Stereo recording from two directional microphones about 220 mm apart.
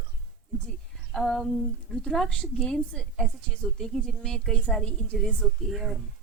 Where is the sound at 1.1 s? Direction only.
Centre (ahead or behind).